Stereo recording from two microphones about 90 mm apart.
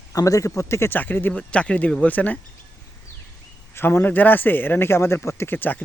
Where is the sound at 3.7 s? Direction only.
25° left (ahead or behind).